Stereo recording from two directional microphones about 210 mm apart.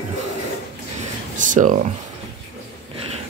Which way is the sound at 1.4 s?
35° right (ahead or behind).